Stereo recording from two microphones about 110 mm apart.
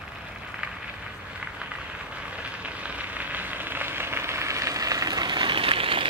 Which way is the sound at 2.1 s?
10° right (ahead or behind).